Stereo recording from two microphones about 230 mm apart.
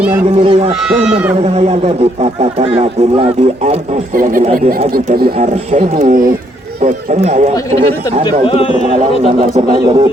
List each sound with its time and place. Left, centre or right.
0.3 s speech: right
0.8 s speech: centre
1.5 s speech: right
8.4 s a man's voice: left
8.9 s speech: right